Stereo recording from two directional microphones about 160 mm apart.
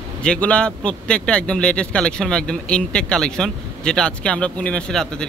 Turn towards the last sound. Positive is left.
turn(degrees=5)  # may be behind; listen again after turning